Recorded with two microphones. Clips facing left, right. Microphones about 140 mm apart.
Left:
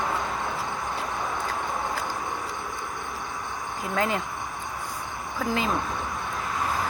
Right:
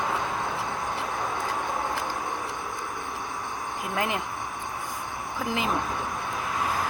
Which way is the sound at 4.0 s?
20° right (ahead or behind).